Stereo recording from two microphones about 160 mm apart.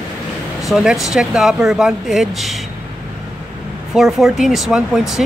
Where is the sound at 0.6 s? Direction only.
5° right (ahead or behind).